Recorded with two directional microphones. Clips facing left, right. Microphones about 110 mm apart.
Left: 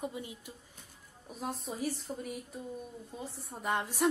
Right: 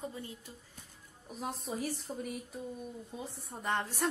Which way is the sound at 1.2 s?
Centre (ahead or behind).